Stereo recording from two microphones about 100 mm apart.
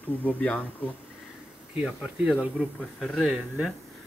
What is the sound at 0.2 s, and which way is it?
Speech, 15° left (ahead or behind).